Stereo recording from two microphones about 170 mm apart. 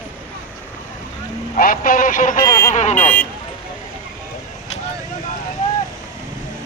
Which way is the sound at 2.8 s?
45° left (ahead or behind).